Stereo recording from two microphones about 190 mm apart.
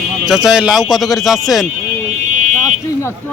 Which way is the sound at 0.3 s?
5° right (ahead or behind).